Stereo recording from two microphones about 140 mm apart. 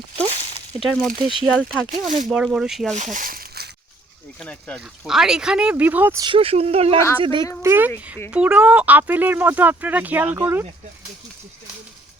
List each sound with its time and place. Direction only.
0.8 s speech: 5° left (ahead or behind)
1.9 s speech: 65° right (ahead or behind)
2.3 s speech: 5° right (ahead or behind)
2.9 s speech: 60° right (ahead or behind); by 3.4 s 80° right
4.4 s speech: 10° left (ahead or behind)
5.0 s speech: 5° right (ahead or behind)
6.1 s a woman's voice: 35° right (ahead or behind)
7.6 s speech: 15° right (ahead or behind)